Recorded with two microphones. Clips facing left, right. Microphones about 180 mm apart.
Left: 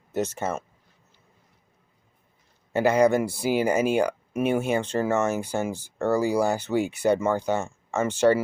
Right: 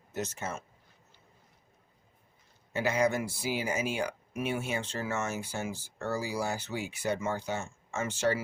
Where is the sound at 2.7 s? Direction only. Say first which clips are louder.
Left 9 dB; 60° left (ahead or behind).